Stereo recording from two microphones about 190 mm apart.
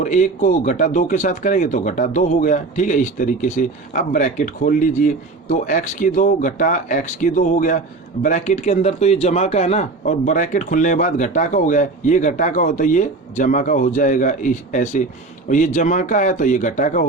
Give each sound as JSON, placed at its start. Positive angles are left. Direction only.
{"t": 0.0, "sound": "a man's voice", "side_deg": 40}